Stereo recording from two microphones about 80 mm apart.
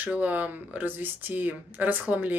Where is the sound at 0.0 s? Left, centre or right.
Centre.